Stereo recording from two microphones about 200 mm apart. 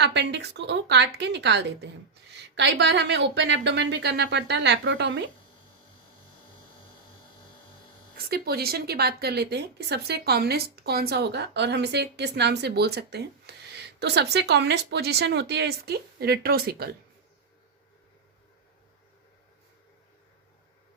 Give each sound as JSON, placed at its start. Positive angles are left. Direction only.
{"t": 0.0, "sound": "a woman's voice", "side_deg": -60}
{"t": 8.3, "sound": "a woman's voice", "side_deg": -50}